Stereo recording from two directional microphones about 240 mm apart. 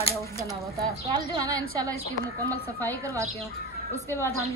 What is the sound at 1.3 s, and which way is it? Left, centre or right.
Speech, centre.